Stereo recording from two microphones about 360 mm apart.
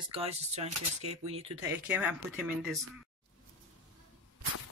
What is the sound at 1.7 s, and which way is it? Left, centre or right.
Speech, centre.